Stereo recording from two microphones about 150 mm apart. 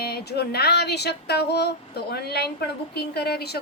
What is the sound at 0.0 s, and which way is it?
Music, 90° left.